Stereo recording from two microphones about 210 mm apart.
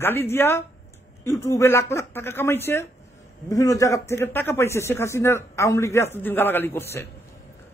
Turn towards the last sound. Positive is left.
turn(degrees=10)  # may be behind; listen again after turning